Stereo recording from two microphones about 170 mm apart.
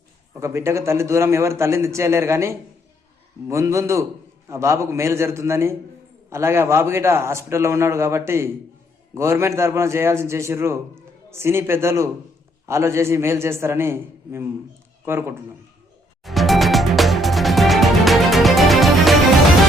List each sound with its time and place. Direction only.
0.3 s a man's voice: 15° right (ahead or behind)
16.2 s music: centre (ahead or behind)